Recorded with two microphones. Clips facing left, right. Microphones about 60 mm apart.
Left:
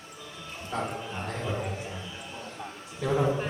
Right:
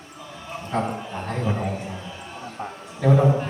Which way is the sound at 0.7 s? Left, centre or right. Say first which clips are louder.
Right 7 dB; right.